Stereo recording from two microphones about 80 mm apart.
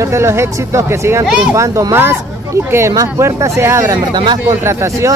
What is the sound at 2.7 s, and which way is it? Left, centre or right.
Speech, right.